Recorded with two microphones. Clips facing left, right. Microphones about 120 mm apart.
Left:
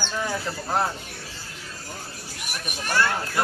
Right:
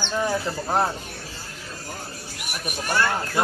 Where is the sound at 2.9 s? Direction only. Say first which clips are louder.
Even; 15° right (ahead or behind).